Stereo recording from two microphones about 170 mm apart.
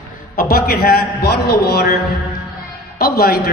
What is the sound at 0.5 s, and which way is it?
A man's voice, 65° left (ahead or behind).